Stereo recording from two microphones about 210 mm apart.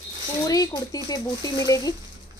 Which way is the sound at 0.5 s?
15° left (ahead or behind).